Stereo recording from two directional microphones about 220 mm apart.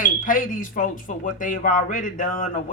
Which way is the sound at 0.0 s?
40° left (ahead or behind).